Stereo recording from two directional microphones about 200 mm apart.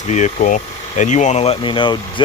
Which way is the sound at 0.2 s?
40° left (ahead or behind).